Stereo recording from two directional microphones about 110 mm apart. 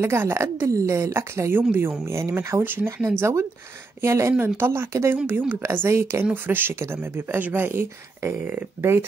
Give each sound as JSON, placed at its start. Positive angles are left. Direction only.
{"t": 0.0, "sound": "speech", "side_deg": -25}